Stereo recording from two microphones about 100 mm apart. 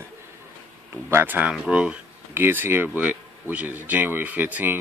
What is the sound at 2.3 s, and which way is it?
Speech, 20° right (ahead or behind).